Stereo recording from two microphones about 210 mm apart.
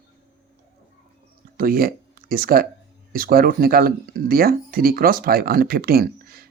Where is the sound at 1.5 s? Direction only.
45° right (ahead or behind).